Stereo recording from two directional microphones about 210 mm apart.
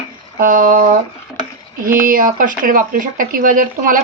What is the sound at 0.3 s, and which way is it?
Speech, 40° right (ahead or behind).